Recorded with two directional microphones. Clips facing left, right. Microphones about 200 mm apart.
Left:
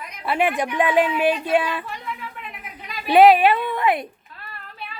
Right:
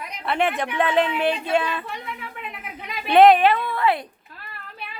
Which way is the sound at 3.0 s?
10° left (ahead or behind).